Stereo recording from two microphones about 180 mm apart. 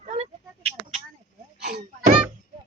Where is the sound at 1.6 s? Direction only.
50° right (ahead or behind).